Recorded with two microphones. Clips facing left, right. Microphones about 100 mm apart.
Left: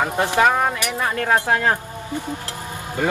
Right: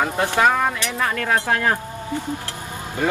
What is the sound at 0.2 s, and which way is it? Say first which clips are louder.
Speech: left 1 dB; 15° left (ahead or behind).